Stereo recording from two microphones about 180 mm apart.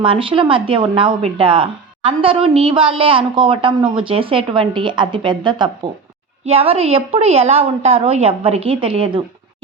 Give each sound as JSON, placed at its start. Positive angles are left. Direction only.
{"t": 0.0, "sound": "a woman's voice", "side_deg": -30}